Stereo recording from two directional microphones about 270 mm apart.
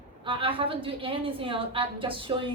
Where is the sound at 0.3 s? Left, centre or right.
Centre.